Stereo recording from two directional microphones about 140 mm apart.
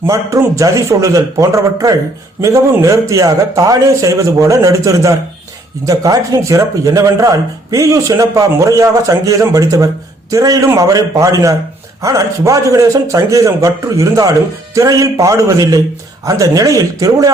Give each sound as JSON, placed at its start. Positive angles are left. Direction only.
{"t": 0.0, "sound": "a man's voice", "side_deg": -20}